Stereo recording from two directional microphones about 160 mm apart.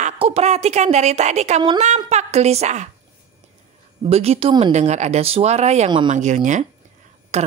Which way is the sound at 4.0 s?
40° right (ahead or behind).